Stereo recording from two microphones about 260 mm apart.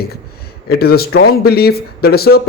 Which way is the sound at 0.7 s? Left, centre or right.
Left.